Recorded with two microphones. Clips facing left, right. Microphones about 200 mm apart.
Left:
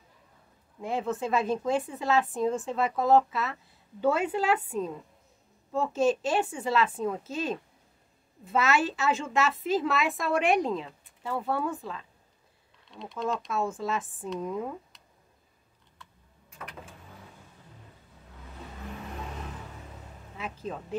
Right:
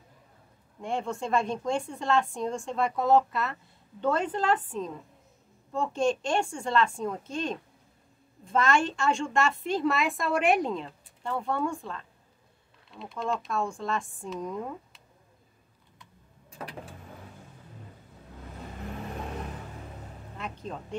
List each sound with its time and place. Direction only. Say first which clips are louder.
0.7 s a woman's voice: left 1 dB; 5° left (ahead or behind)
16.4 s vehicle: right 4 dB; 30° right (ahead or behind)
20.3 s a woman's voice: left 2 dB; 5° left (ahead or behind)